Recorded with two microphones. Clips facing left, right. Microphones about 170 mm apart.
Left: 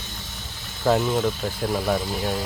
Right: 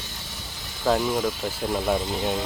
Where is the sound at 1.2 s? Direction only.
10° right (ahead or behind).